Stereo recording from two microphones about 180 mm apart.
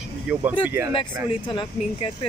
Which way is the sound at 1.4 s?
30° left (ahead or behind).